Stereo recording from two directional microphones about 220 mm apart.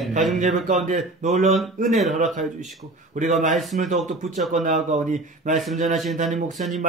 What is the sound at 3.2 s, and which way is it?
Speech, 35° right (ahead or behind).